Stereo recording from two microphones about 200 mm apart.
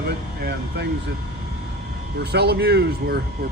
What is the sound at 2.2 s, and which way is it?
Speech, 55° right (ahead or behind).